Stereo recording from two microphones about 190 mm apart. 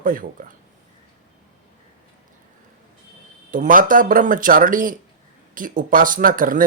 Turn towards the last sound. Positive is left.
turn(degrees=-45)  # may be behind; listen again after turning